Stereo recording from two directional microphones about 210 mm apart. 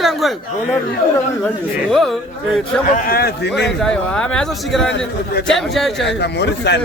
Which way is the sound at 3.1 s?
50° left (ahead or behind).